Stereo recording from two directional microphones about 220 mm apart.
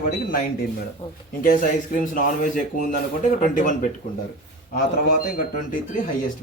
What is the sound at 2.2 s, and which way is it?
Speech, 40° left (ahead or behind).